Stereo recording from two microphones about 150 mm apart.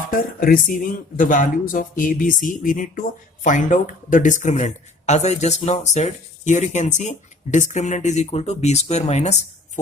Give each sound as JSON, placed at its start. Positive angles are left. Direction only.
{"t": 0.1, "sound": "speech", "side_deg": 70}